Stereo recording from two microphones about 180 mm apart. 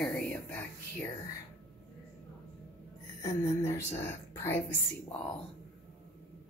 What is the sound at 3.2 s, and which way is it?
A woman's voice, 20° left (ahead or behind).